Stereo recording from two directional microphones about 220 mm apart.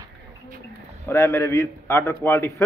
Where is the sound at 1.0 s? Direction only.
10° left (ahead or behind).